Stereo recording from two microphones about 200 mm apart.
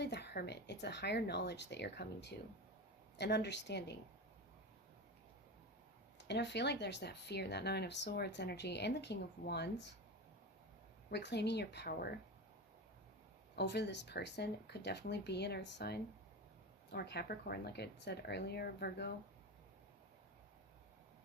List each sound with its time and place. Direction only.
0.0 s speech: 55° left (ahead or behind)
6.1 s speech: 60° left (ahead or behind)
11.1 s speech: 60° left (ahead or behind)
13.6 s speech: 55° left (ahead or behind)